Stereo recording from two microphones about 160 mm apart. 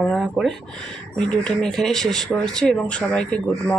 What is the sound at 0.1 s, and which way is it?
Speech, centre (ahead or behind).